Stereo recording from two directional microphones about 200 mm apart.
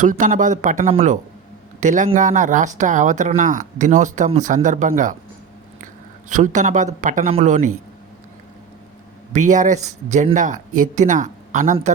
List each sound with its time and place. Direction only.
0.0 s speech: 40° right (ahead or behind)
9.3 s speech: 40° right (ahead or behind)